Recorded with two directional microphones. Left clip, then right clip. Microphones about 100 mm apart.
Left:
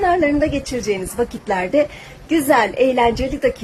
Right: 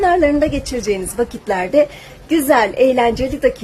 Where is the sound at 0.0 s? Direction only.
35° right (ahead or behind).